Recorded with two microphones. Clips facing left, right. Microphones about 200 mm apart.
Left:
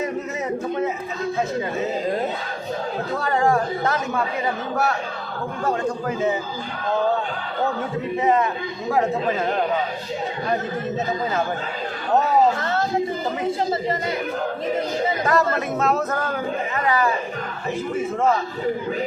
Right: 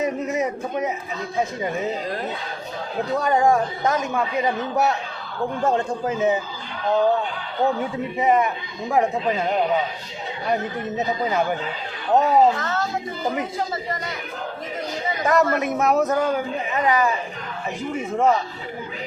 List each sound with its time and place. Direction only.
0.0 s a man's voice: 15° right (ahead or behind)
3.2 s a man's voice: 15° right (ahead or behind)
5.6 s speech: 25° right (ahead or behind)
8.2 s a man's voice: 15° right (ahead or behind)
15.2 s speech: 20° right (ahead or behind)